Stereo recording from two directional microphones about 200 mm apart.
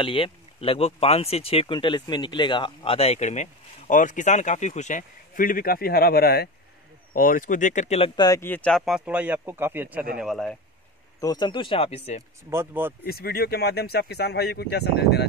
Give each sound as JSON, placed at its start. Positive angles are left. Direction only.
{"t": 0.0, "sound": "speech", "side_deg": 25}
{"t": 8.2, "sound": "speech", "side_deg": 15}
{"t": 11.1, "sound": "speech", "side_deg": 20}
{"t": 12.4, "sound": "speech", "side_deg": -10}
{"t": 13.0, "sound": "speech", "side_deg": 50}